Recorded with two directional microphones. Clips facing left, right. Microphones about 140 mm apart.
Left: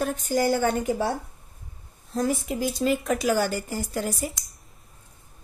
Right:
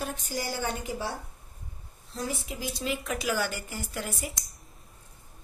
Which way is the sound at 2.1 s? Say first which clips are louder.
Left 9 dB; 50° left (ahead or behind).